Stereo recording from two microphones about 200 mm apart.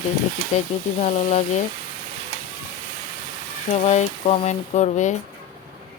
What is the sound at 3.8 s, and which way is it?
Speech, 35° left (ahead or behind).